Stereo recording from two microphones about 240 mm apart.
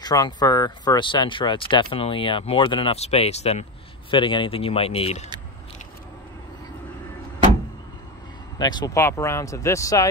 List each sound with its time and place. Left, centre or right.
0.0 s speech: centre
8.5 s speech: centre